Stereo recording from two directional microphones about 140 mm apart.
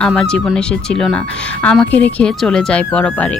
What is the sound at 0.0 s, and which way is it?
Speech, 5° left (ahead or behind).